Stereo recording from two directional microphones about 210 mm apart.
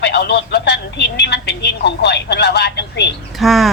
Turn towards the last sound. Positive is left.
turn(degrees=0)  # may be behind; listen again after turning